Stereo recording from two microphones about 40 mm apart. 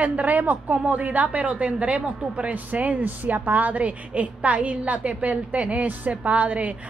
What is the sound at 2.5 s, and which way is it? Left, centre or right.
A woman's voice, right.